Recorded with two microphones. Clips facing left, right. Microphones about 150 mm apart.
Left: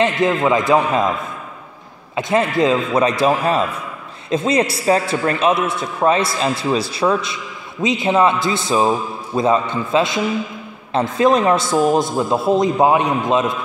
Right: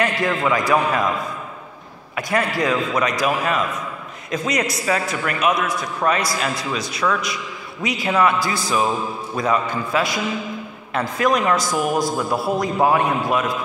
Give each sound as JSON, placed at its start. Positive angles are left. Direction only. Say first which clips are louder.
{"t": 0.0, "sound": "a man's voice", "louder": "left 4 dB", "side_deg": 20}
{"t": 2.1, "sound": "a man's voice", "louder": "left 5 dB", "side_deg": 25}